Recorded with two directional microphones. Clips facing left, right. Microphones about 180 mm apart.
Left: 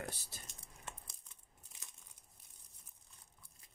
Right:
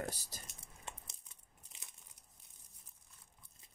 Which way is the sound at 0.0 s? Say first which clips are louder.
Right 3 dB; 40° right (ahead or behind).